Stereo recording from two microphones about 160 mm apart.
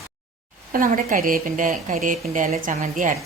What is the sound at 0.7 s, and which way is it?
A woman's voice, 60° right (ahead or behind).